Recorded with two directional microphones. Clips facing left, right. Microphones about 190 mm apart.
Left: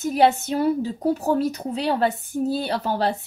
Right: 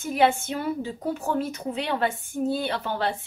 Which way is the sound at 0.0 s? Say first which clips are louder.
Left 3 dB; 40° left (ahead or behind).